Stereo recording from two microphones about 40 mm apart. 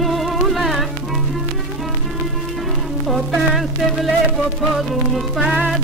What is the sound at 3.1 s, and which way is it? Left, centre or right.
Speech, centre.